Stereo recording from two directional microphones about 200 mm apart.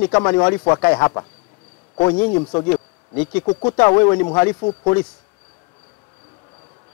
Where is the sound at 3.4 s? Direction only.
20° left (ahead or behind).